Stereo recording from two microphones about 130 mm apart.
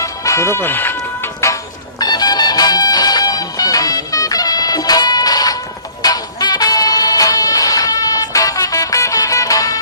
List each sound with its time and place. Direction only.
0.0 s music: 25° left (ahead or behind)
2.0 s music: 30° left (ahead or behind)